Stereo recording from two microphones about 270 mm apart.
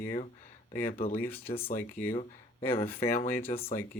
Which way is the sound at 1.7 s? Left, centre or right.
Left.